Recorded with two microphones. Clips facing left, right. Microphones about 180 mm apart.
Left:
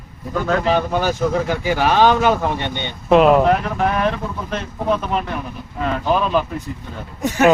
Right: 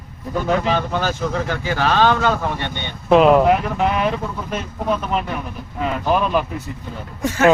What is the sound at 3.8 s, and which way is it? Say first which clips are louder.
Speech: even; 10° right (ahead or behind).